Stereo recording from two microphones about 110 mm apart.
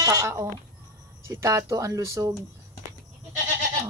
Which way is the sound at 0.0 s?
35° right (ahead or behind).